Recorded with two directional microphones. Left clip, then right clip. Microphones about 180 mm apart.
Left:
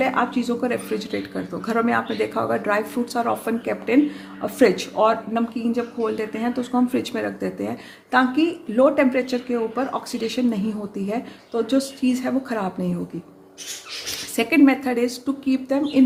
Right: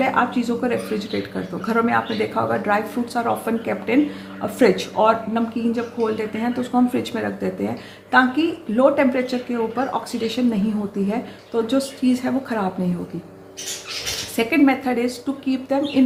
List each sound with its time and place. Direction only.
0.0 s speech: 35° left (ahead or behind)
14.3 s speech: 40° left (ahead or behind)